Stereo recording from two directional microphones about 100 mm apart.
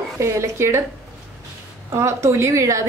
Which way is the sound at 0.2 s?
30° right (ahead or behind).